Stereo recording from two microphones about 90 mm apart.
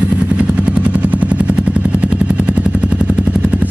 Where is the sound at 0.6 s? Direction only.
15° right (ahead or behind).